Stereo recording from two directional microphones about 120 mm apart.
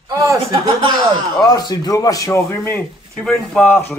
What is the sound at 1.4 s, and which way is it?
A man's voice, 30° left (ahead or behind).